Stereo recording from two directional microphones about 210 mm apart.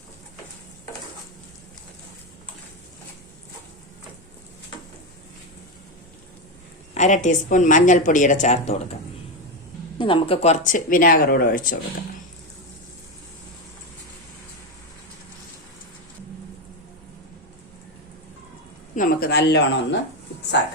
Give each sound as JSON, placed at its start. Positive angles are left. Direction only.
{"t": 6.9, "sound": "speech", "side_deg": 35}
{"t": 10.0, "sound": "speech", "side_deg": 25}
{"t": 18.9, "sound": "speech", "side_deg": 45}